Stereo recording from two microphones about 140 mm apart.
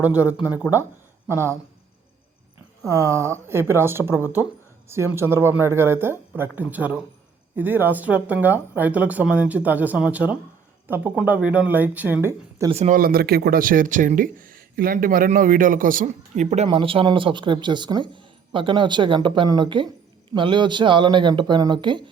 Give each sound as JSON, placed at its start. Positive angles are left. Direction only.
{"t": 0.0, "sound": "speech", "side_deg": -10}
{"t": 2.8, "sound": "speech", "side_deg": -20}
{"t": 12.7, "sound": "speech", "side_deg": -50}
{"t": 13.0, "sound": "speech", "side_deg": -90}
{"t": 16.6, "sound": "speech", "side_deg": -40}